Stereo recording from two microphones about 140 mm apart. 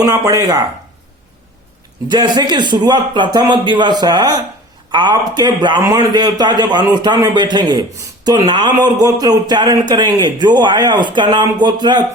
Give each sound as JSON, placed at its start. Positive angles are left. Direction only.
{"t": 0.0, "sound": "speech", "side_deg": -25}
{"t": 2.0, "sound": "a man's voice", "side_deg": -30}